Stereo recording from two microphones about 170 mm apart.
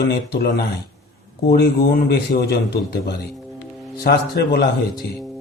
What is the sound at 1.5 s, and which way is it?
Speech, 65° left (ahead or behind).